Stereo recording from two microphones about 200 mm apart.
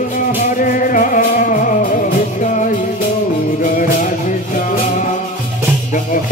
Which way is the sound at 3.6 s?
40° left (ahead or behind).